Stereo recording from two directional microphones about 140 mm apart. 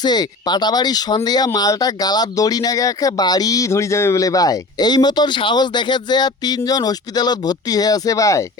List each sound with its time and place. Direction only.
0.0 s speech: 30° left (ahead or behind)